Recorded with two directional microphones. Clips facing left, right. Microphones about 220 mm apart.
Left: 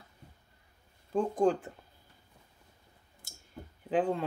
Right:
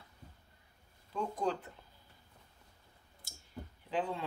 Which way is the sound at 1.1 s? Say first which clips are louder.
Left 8 dB; 50° left (ahead or behind).